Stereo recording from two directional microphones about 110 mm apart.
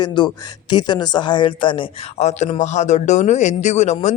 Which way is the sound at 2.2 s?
90° left.